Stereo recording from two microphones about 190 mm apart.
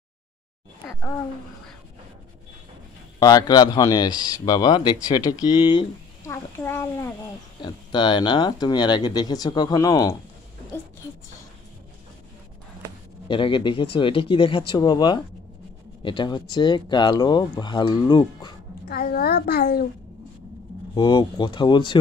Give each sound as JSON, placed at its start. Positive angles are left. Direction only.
{"t": 3.2, "sound": "speech", "side_deg": 20}
{"t": 6.3, "sound": "a child's voice", "side_deg": 10}
{"t": 7.6, "sound": "speech", "side_deg": 25}
{"t": 13.3, "sound": "speech", "side_deg": 25}
{"t": 18.9, "sound": "a child's voice", "side_deg": 50}
{"t": 20.9, "sound": "speech", "side_deg": 25}